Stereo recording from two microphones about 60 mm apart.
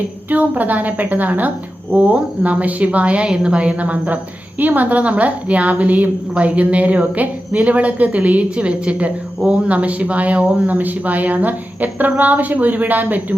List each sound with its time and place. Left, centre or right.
0.3 s a woman's voice: right